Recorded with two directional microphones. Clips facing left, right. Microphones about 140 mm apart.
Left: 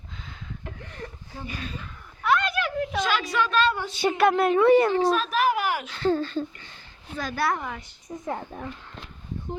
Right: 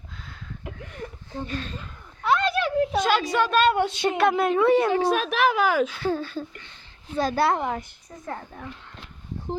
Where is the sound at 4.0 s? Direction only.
Centre (ahead or behind).